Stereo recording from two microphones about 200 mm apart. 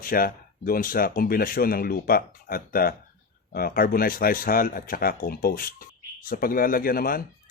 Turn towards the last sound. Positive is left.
turn(degrees=45)  # may be behind; listen again after turning